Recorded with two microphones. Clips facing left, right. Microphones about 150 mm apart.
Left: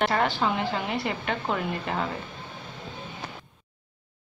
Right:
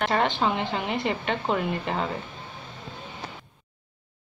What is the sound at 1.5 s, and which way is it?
Speech, 15° right (ahead or behind).